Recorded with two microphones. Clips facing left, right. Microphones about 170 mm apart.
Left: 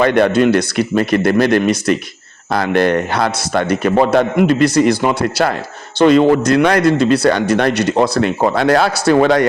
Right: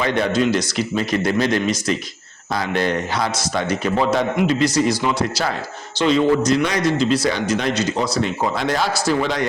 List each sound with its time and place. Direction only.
0.0 s a man's voice: 60° left (ahead or behind)